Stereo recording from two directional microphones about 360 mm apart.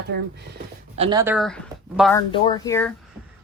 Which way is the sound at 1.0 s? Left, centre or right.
Centre.